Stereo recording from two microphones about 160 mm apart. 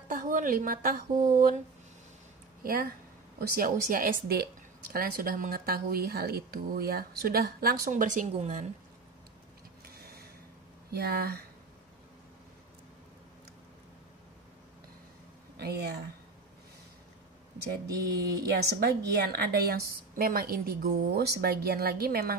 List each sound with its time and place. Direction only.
0.1 s speech: 55° right (ahead or behind)
3.3 s a woman's voice: 65° right (ahead or behind); by 8.6 s 50° right (ahead or behind)
10.9 s speech: 80° right
15.5 s speech: 90° right
17.8 s speech: 20° right (ahead or behind)
18.8 s a woman's voice: 75° right (ahead or behind)